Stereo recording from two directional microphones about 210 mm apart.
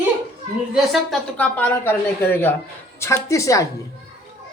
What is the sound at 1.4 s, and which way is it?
A woman's voice, 10° left (ahead or behind).